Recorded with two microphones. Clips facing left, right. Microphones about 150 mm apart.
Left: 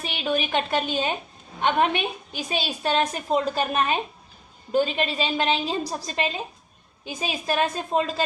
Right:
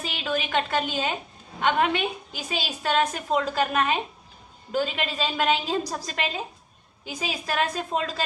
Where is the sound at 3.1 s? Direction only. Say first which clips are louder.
Left 2 dB; 20° left (ahead or behind).